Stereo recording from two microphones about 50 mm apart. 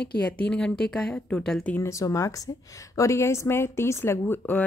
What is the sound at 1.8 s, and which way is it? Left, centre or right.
Speech, left.